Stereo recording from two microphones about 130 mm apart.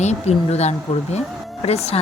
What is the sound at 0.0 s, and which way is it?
Speech, 55° left (ahead or behind).